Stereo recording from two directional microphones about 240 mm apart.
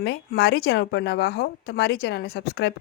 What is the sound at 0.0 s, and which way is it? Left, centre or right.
A woman's voice, left.